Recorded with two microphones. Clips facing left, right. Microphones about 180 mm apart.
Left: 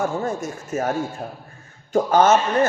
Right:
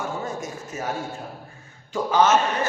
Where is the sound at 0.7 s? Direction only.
50° left (ahead or behind).